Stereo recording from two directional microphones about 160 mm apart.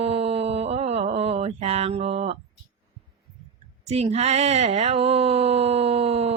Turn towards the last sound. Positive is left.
turn(degrees=-40)  # may be behind; listen again after turning